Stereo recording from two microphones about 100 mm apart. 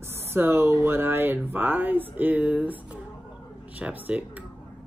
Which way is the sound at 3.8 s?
15° right (ahead or behind).